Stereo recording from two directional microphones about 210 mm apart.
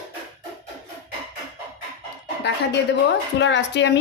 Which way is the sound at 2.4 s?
55° left (ahead or behind).